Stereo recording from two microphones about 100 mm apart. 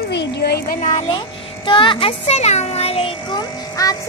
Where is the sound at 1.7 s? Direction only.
55° left (ahead or behind); by 3.2 s 80° left.